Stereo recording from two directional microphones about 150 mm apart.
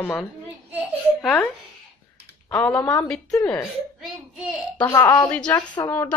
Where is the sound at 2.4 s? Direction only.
5° left (ahead or behind).